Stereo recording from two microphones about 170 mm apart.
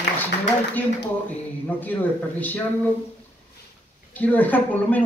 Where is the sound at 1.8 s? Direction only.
10° left (ahead or behind).